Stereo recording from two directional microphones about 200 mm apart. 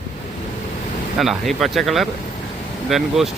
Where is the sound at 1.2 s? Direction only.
Centre (ahead or behind).